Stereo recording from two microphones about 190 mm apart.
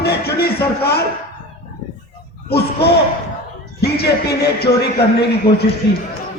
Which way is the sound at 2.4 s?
60° left (ahead or behind).